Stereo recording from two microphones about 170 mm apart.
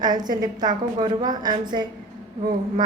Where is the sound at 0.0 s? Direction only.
25° right (ahead or behind).